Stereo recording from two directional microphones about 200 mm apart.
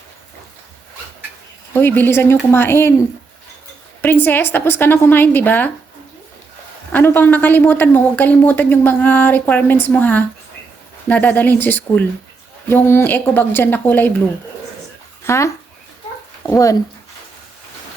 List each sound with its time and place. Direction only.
1.7 s a woman's voice: 10° left (ahead or behind)
4.0 s a woman's voice: 10° left (ahead or behind)
6.9 s a woman's voice: 10° left (ahead or behind)
15.2 s speech: 15° left (ahead or behind)